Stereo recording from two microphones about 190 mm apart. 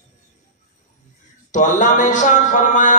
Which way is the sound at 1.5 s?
40° left (ahead or behind).